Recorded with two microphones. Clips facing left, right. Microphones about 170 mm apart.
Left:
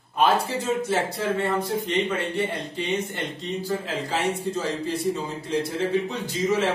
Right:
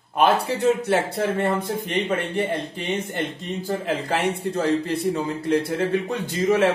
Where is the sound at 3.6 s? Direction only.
55° right (ahead or behind).